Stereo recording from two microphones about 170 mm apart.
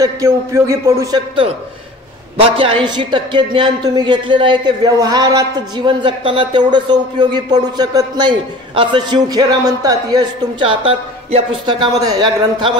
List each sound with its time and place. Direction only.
0.0 s a man's voice: 20° right (ahead or behind)
2.5 s speech: 30° right (ahead or behind)